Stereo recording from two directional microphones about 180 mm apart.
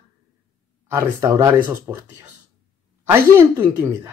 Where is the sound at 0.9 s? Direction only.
15° right (ahead or behind).